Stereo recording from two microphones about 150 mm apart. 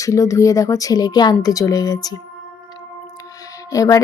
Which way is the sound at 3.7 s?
20° left (ahead or behind).